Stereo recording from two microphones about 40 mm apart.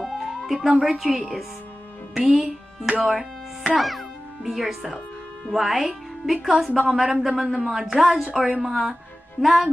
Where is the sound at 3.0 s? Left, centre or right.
Centre.